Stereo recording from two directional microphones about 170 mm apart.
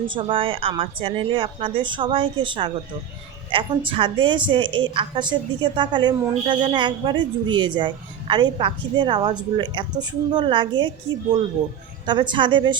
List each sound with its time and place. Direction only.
0.1 s a woman's voice: 30° right (ahead or behind)
12.0 s a woman's voice: 25° right (ahead or behind)